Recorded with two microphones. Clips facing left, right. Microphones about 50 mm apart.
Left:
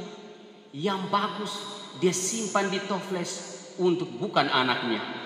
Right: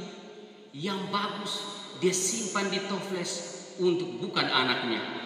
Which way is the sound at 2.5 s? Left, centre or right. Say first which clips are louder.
Left 4 dB; left.